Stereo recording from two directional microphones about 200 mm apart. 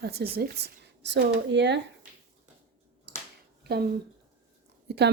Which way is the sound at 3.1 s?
55° right (ahead or behind).